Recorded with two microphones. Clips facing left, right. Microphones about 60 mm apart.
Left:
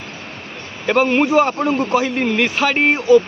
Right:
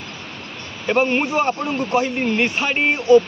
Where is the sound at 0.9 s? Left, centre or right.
Left.